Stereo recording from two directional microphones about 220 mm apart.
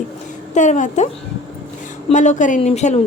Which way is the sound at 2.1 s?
35° left (ahead or behind).